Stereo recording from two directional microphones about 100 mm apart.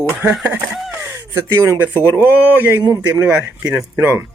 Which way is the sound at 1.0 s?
30° right (ahead or behind).